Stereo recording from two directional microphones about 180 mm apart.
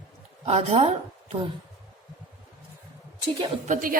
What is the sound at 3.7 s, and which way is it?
Speech, 50° right (ahead or behind).